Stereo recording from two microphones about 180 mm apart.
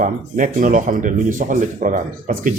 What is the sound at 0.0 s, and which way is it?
Speech, 45° right (ahead or behind).